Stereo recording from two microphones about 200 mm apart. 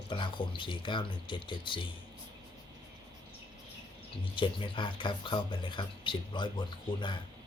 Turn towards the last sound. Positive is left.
turn(degrees=25)  # may be behind; listen again after turning